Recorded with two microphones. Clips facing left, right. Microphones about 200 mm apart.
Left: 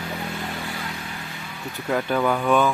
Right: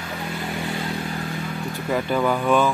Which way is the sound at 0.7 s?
30° right (ahead or behind).